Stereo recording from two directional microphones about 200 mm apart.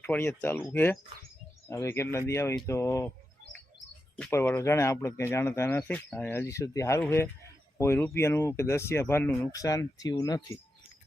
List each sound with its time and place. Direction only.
0.0 s speech: 10° left (ahead or behind)
4.2 s speech: 10° left (ahead or behind)